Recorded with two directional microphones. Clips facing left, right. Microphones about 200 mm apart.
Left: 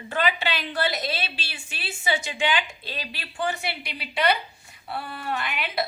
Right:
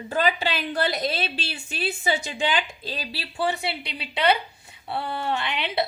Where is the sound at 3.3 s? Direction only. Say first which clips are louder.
Right 2 dB; 25° right (ahead or behind).